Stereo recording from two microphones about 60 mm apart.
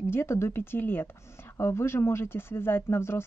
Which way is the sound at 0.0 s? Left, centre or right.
Left.